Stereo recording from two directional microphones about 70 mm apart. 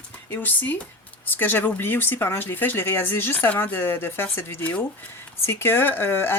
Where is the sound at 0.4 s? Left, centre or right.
Left.